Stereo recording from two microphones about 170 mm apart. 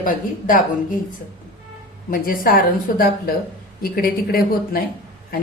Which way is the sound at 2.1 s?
55° left (ahead or behind).